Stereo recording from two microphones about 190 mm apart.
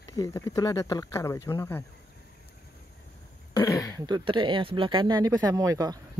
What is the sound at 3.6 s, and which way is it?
Throat clearing, 15° left (ahead or behind).